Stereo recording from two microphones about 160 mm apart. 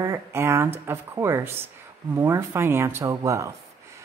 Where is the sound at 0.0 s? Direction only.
15° right (ahead or behind).